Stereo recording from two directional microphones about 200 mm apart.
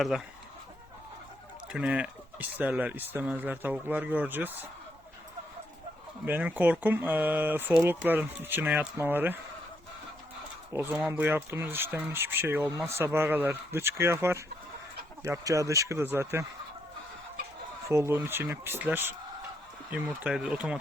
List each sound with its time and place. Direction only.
1.7 s speech: 5° right (ahead or behind)
6.2 s speech: 10° right (ahead or behind)
10.7 s speech: 10° right (ahead or behind)
17.8 s speech: 15° right (ahead or behind)